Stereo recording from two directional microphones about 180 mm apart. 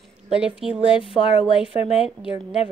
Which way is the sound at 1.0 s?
30° left (ahead or behind).